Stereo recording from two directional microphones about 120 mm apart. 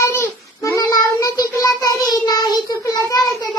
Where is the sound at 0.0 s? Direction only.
25° left (ahead or behind).